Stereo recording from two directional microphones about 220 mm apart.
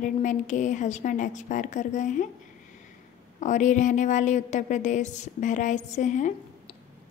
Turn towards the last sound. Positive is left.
turn(degrees=35)  # may be behind; listen again after turning